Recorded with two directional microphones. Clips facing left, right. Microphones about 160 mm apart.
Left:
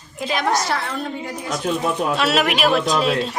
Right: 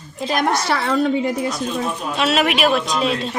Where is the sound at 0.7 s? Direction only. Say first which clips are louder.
Right 7 dB; 70° right (ahead or behind).